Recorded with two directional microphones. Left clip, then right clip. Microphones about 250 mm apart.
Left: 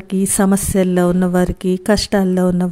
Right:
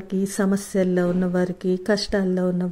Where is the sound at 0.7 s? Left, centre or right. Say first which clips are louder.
Left 4 dB; left.